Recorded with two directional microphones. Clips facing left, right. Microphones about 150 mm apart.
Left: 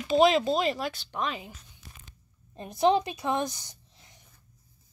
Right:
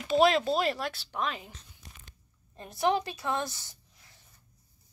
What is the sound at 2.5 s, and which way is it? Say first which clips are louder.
A woman's voice: left 4 dB; 20° left (ahead or behind).